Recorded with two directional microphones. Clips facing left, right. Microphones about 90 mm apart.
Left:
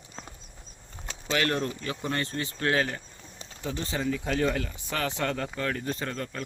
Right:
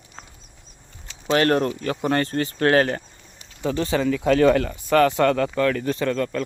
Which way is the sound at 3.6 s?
70° right (ahead or behind).